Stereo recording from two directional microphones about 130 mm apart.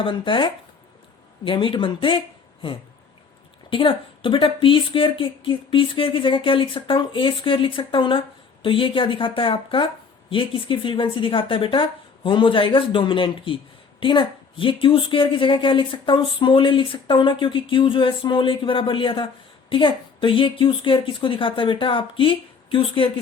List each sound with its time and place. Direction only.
0.0 s a woman's voice: 40° left (ahead or behind)